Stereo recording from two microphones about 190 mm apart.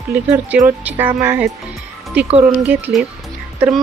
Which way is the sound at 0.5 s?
10° right (ahead or behind).